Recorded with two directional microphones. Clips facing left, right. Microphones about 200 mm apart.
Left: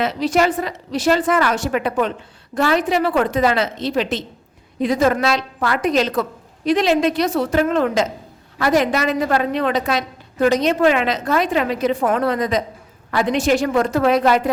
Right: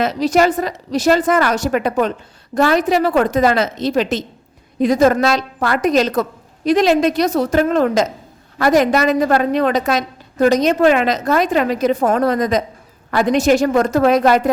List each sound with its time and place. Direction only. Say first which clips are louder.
0.0 s a woman's voice: right 3 dB; 40° right (ahead or behind)